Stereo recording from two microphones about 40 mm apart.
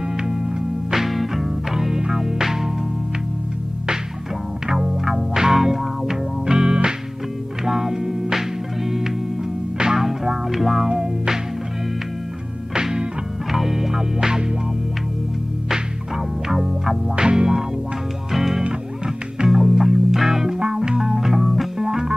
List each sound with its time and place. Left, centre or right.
0.2 s music: centre
0.9 s music: centre
4.6 s music: centre
12.7 s music: centre
13.5 s music: centre
16.4 s music: centre
17.1 s music: right
18.3 s music: centre
21.7 s music: centre